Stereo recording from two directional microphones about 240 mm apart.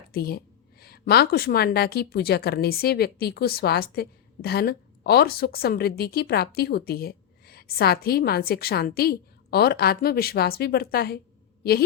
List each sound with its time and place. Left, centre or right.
0.1 s a woman's voice: left